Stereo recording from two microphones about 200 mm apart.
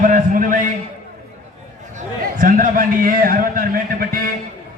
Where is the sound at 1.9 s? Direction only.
45° right (ahead or behind).